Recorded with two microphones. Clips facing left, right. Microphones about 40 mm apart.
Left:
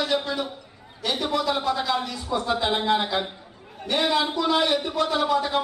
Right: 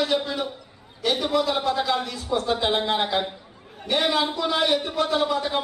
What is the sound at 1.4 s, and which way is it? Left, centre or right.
Speech, right.